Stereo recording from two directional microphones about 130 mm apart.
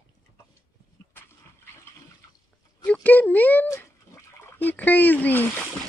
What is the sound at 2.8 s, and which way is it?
Cat, 10° left (ahead or behind).